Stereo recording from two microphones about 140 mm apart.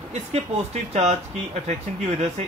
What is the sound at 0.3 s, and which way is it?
Speech, 50° right (ahead or behind).